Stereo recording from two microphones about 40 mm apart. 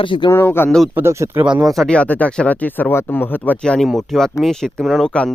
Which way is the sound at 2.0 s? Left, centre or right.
Left.